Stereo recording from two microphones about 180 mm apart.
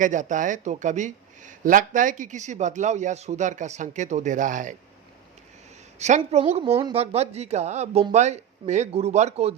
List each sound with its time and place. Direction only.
0.0 s speech: 45° right (ahead or behind)
6.0 s speech: 40° right (ahead or behind)